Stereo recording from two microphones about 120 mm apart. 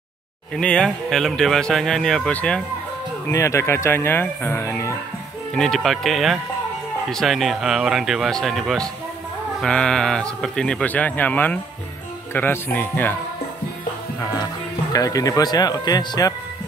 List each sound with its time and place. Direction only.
0.6 s speech: 5° left (ahead or behind)
3.3 s speech: 25° left (ahead or behind)
5.5 s speech: 5° left (ahead or behind)
14.2 s speech: 30° left (ahead or behind)